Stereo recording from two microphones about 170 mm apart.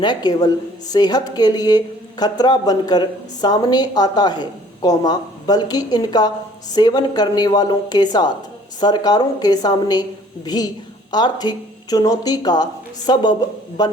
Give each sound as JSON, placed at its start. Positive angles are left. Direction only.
{"t": 0.0, "sound": "speech", "side_deg": 25}